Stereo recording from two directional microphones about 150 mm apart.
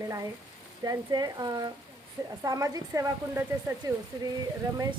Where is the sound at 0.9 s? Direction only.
25° right (ahead or behind).